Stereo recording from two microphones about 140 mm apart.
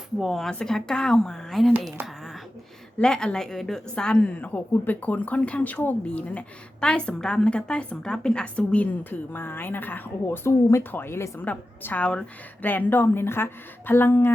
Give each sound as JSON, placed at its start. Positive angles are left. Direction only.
{"t": 0.2, "sound": "speech", "side_deg": 0}
{"t": 3.0, "sound": "a woman's voice", "side_deg": 5}